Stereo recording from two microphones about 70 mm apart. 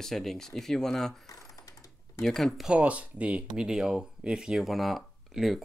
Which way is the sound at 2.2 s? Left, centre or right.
Centre.